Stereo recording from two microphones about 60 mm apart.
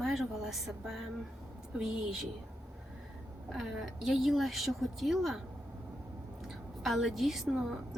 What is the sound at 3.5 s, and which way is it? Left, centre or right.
A woman's voice, centre.